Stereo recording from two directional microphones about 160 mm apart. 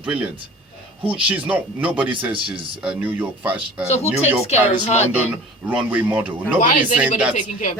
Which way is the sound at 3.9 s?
45° left (ahead or behind).